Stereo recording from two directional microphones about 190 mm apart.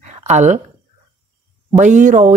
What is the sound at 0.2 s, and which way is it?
Speech, 35° right (ahead or behind).